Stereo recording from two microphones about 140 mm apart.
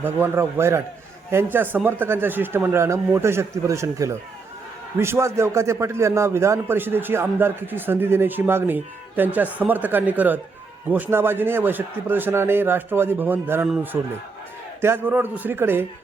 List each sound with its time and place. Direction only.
0.0 s a man's voice: 15° right (ahead or behind)